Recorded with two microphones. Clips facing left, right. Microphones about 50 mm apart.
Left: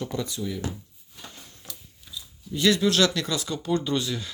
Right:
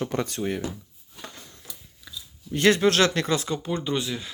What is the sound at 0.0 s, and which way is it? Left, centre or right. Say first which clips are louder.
Speech: right 3 dB; right.